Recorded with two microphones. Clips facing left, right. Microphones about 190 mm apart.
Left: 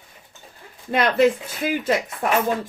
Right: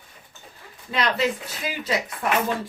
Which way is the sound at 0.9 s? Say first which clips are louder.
Left 6 dB; 50° left (ahead or behind).